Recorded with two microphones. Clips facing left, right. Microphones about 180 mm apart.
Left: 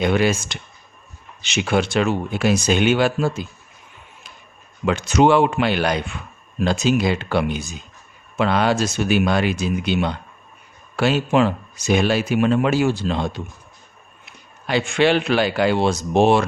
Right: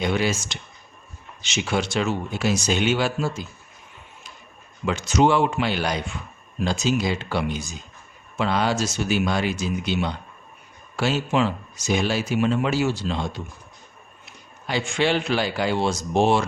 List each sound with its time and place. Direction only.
0.0 s speech: 55° left (ahead or behind)
4.9 s speech: 60° left (ahead or behind)
14.7 s speech: 65° left (ahead or behind)